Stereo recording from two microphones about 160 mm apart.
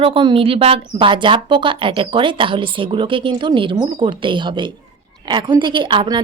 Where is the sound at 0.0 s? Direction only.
30° right (ahead or behind).